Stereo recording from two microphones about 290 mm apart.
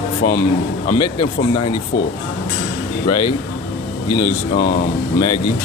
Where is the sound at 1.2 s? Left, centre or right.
Centre.